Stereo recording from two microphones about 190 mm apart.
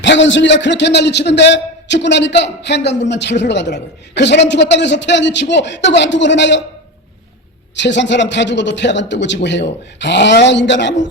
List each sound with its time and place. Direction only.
0.0 s a man's voice: 75° left (ahead or behind)
7.8 s a man's voice: 70° left (ahead or behind)